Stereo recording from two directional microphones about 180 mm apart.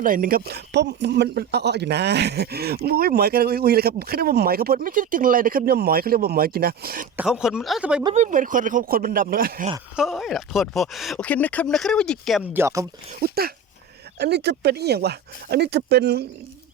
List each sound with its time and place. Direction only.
0.0 s speech: 50° right (ahead or behind)
7.2 s speech: 5° right (ahead or behind)
8.1 s speech: 45° right (ahead or behind)
9.9 s speech: centre (ahead or behind)
12.5 s speech: 15° right (ahead or behind)
13.1 s speech: 55° right (ahead or behind)